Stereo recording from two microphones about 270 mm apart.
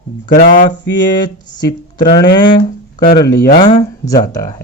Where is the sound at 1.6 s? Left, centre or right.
Centre.